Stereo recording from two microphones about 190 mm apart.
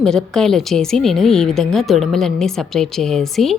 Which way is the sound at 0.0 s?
Centre (ahead or behind).